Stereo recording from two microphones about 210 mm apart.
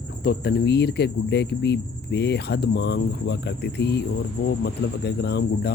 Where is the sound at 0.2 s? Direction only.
50° left (ahead or behind).